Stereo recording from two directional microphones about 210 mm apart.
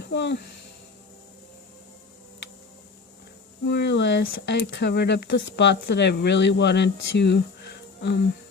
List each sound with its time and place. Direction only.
0.1 s speech: 55° left (ahead or behind)
3.7 s speech: 55° left (ahead or behind)